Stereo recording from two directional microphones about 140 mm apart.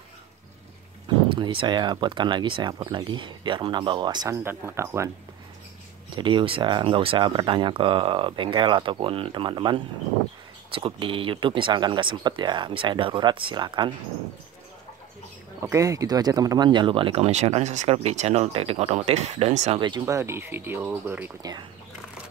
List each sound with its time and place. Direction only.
1.0 s speech: 35° right (ahead or behind)
4.3 s speech: 20° right (ahead or behind)
6.1 s speech: 35° right (ahead or behind)
15.6 s speech: 25° right (ahead or behind); by 19.8 s 50° right (ahead or behind)
19.8 s speech: 35° right (ahead or behind)
20.2 s speech: 20° right (ahead or behind)
21.4 s speech: 30° right (ahead or behind)